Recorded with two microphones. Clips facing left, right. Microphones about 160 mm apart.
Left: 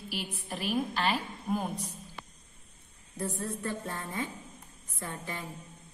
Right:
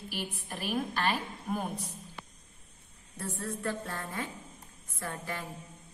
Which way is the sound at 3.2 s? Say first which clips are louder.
Left 2 dB; 20° left (ahead or behind).